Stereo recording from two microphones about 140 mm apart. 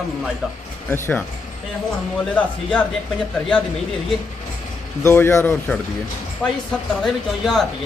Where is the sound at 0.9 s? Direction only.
15° left (ahead or behind).